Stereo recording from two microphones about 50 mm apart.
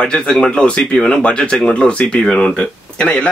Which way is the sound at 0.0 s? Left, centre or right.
Centre.